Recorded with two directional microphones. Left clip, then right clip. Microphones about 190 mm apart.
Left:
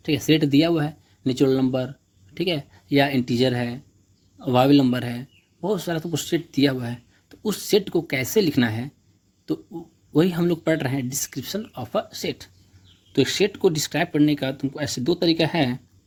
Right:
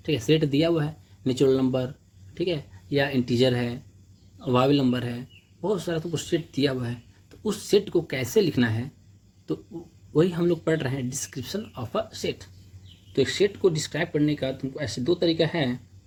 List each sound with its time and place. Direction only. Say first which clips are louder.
0.0 s a man's voice: left 3 dB; 40° left (ahead or behind)
2.3 s a man's voice: left 3 dB; 50° left (ahead or behind)
13.1 s speech: left 2 dB; 55° left (ahead or behind)